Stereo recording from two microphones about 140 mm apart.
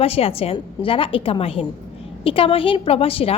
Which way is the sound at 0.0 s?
45° left (ahead or behind).